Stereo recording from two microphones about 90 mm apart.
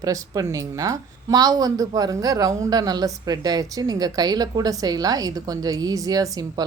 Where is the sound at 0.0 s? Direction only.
40° right (ahead or behind).